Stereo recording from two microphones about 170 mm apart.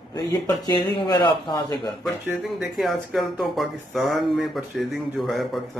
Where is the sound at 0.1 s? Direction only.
25° left (ahead or behind).